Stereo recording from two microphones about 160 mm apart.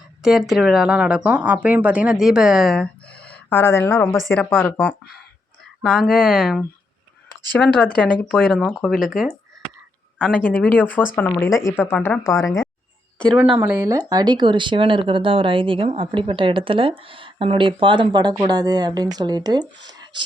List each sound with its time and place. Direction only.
0.2 s speech: 5° right (ahead or behind)
10.7 s speech: 10° left (ahead or behind)
13.3 s speech: 5° right (ahead or behind); by 20.2 s 25° right (ahead or behind)